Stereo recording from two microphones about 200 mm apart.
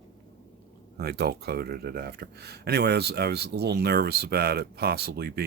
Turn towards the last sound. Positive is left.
turn(degrees=-55)  # may be behind; listen again after turning